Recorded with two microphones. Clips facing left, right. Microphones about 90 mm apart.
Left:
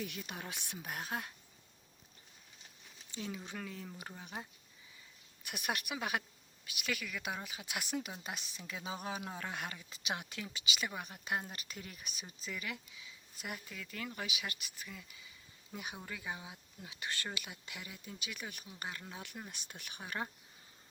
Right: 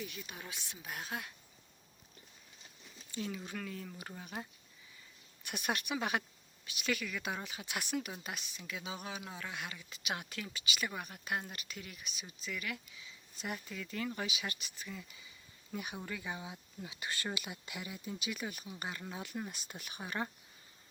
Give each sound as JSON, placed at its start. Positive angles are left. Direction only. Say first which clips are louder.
{"t": 0.0, "sound": "speech", "louder": "left 2 dB", "side_deg": 65}
{"t": 3.2, "sound": "speech", "louder": "right 2 dB", "side_deg": 5}
{"t": 3.4, "sound": "speech", "louder": "right 2 dB", "side_deg": 20}
{"t": 4.0, "sound": "speech", "louder": "right 1 dB", "side_deg": 5}
{"t": 5.4, "sound": "speech", "louder": "right 2 dB", "side_deg": 15}
{"t": 8.2, "sound": "speech", "louder": "even", "side_deg": 25}
{"t": 10.2, "sound": "speech", "louder": "right 1 dB", "side_deg": 20}
{"t": 11.6, "sound": "speech", "louder": "even", "side_deg": 35}
{"t": 12.2, "sound": "speech", "louder": "right 1 dB", "side_deg": 25}
{"t": 13.4, "sound": "speech", "louder": "right 3 dB", "side_deg": 5}
{"t": 15.7, "sound": "speech", "louder": "right 3 dB", "side_deg": 15}